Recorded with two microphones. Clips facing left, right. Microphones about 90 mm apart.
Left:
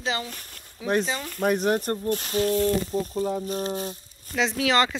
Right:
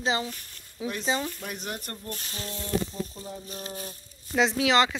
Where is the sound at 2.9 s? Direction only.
55° left (ahead or behind).